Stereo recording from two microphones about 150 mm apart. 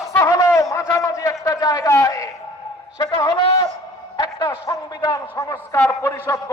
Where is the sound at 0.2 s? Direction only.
20° left (ahead or behind).